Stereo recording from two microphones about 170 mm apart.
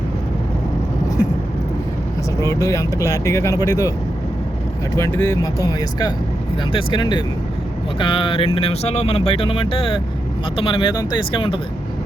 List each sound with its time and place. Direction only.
2.4 s speech: 20° left (ahead or behind)
4.9 s speech: 15° left (ahead or behind); by 11.6 s 30° left (ahead or behind)